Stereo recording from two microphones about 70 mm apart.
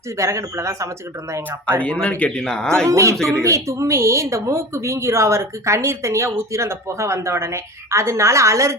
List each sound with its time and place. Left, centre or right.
0.2 s speech: right
1.8 s speech: centre
2.8 s speech: right